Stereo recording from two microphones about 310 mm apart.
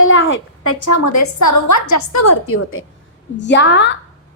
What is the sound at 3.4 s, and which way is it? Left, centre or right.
Speech, left.